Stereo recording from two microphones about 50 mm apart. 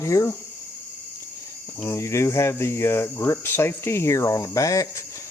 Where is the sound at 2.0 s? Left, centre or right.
Left.